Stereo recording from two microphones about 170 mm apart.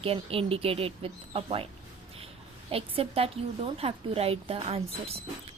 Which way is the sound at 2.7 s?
35° right (ahead or behind).